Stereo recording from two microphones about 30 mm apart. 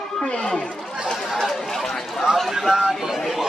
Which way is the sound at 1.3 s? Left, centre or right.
Centre.